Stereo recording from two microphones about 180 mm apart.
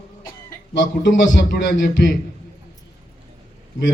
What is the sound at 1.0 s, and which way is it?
A man's voice, 80° left.